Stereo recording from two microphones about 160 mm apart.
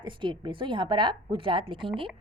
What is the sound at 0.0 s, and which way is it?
A woman's voice, 30° right (ahead or behind).